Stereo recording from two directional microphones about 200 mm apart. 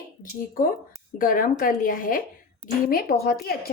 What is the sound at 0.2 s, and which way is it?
A woman's voice, 45° left (ahead or behind).